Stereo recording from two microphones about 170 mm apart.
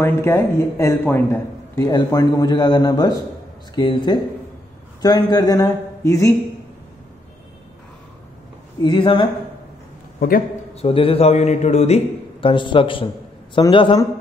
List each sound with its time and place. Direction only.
0.0 s a man's voice: 15° left (ahead or behind)
8.8 s speech: 30° left (ahead or behind)
10.7 s a man's voice: 35° left (ahead or behind)